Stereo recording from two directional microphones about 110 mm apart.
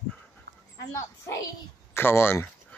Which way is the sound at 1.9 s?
20° left (ahead or behind).